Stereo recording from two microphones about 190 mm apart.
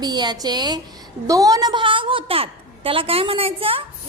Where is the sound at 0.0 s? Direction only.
20° right (ahead or behind).